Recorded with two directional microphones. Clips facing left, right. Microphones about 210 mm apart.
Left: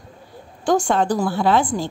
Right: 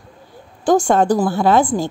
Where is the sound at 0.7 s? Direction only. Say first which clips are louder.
Right 4 dB; 45° right (ahead or behind).